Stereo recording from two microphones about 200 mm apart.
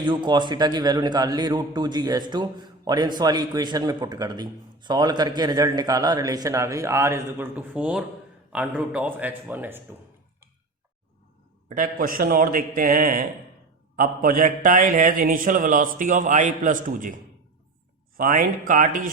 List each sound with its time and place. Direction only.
0.0 s a man's voice: 25° right (ahead or behind)
11.7 s a man's voice: 45° right (ahead or behind)
18.2 s a man's voice: 45° right (ahead or behind)